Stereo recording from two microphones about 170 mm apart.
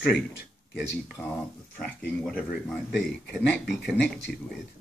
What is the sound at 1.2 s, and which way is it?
Speech, 15° left (ahead or behind).